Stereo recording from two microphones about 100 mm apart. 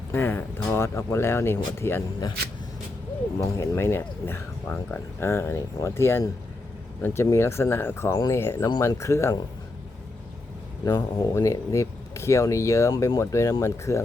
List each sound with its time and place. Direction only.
0.1 s speech: 20° left (ahead or behind)
3.5 s speech: 30° left (ahead or behind)
4.7 s speech: 10° left (ahead or behind)
5.2 s speech: 25° left (ahead or behind)
10.8 s speech: 40° left (ahead or behind)